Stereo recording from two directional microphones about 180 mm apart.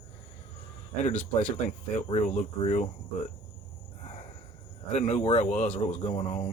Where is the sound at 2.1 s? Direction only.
40° left (ahead or behind).